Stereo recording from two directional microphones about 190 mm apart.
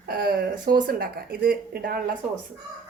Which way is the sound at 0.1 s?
55° right (ahead or behind).